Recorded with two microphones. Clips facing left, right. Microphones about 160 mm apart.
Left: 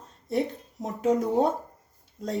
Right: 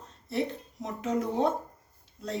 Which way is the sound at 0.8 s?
40° left (ahead or behind).